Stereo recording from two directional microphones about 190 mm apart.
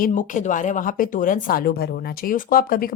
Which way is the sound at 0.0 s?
45° left (ahead or behind).